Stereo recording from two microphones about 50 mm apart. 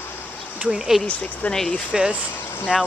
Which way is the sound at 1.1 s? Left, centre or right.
Left.